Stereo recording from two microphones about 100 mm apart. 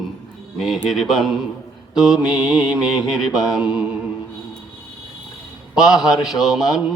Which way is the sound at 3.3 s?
40° left (ahead or behind).